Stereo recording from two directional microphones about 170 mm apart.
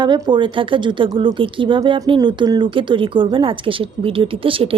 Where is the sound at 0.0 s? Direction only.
25° right (ahead or behind).